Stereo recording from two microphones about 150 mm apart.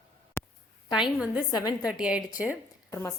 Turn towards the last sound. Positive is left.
turn(degrees=20)  # may be behind; listen again after turning